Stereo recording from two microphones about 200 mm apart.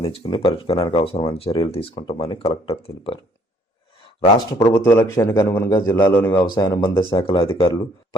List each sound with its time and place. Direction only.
0.0 s speech: 25° left (ahead or behind)
4.4 s a man's voice: 20° left (ahead or behind)